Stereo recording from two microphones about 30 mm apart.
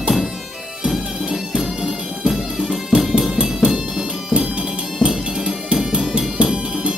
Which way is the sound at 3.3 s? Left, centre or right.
Right.